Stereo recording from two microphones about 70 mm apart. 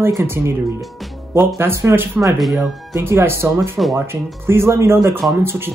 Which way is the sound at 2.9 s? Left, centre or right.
Right.